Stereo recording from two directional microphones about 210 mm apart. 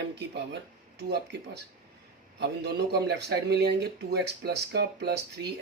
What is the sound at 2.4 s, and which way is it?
Speech, 55° right (ahead or behind).